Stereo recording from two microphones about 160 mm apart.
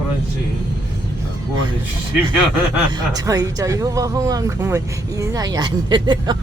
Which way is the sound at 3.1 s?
25° right (ahead or behind).